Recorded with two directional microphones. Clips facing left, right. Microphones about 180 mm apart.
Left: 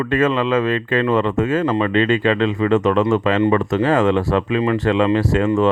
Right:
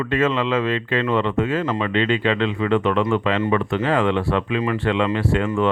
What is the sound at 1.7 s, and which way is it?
Speech, 35° left (ahead or behind).